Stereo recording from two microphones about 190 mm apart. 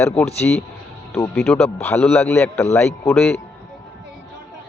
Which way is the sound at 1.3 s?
Centre (ahead or behind).